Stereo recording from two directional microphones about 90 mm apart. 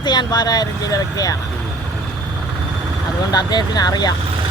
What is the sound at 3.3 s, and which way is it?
Speech, 50° left (ahead or behind).